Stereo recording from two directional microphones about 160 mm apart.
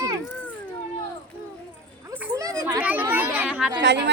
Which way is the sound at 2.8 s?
10° right (ahead or behind).